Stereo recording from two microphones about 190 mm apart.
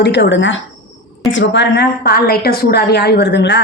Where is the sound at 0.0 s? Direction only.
65° left (ahead or behind).